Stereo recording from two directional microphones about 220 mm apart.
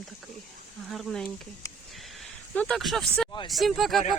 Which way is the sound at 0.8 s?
Centre (ahead or behind).